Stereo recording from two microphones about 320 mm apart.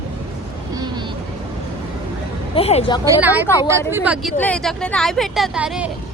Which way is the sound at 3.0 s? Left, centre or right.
Centre.